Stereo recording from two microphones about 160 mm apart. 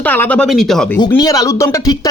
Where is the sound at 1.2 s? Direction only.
25° left (ahead or behind).